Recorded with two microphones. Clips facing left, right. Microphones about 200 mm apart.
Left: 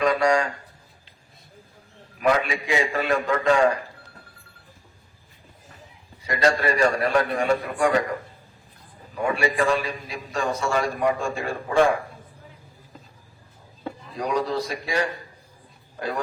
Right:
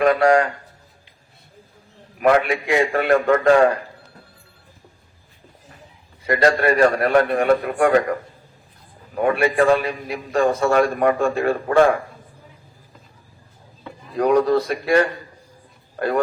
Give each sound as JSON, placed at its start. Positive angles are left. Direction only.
{"t": 0.0, "sound": "a man's voice", "side_deg": -55}
{"t": 2.1, "sound": "a man's voice", "side_deg": -60}
{"t": 6.2, "sound": "a man's voice", "side_deg": -55}
{"t": 9.1, "sound": "a man's voice", "side_deg": -55}
{"t": 14.1, "sound": "a man's voice", "side_deg": -60}